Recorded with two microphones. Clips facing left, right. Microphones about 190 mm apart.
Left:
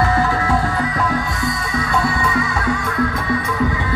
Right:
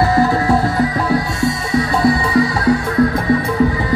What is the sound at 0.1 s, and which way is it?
Music, 35° right (ahead or behind).